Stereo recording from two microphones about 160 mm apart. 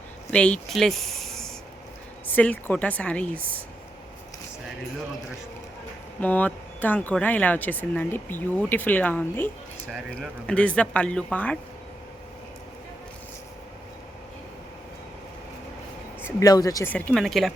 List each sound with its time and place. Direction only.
0.3 s speech: 10° left (ahead or behind)
6.1 s speech: 10° left (ahead or behind)
16.2 s speech: 25° left (ahead or behind)
16.9 s speech: 5° left (ahead or behind)